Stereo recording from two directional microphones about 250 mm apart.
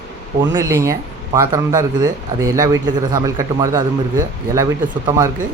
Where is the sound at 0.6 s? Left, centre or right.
Centre.